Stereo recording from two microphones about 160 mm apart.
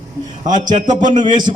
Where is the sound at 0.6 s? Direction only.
25° right (ahead or behind).